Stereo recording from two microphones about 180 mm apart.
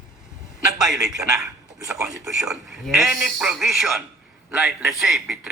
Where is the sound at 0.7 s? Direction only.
Centre (ahead or behind).